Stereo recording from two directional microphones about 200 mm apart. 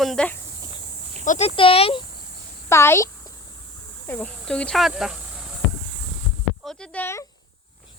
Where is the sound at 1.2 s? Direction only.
35° left (ahead or behind).